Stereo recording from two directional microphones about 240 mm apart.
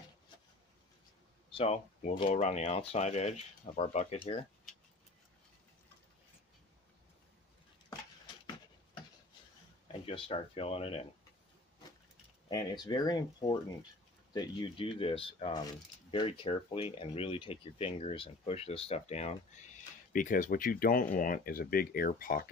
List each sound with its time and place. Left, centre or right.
1.5 s speech: left
10.0 s speech: left
12.4 s speech: centre; by 22.5 s left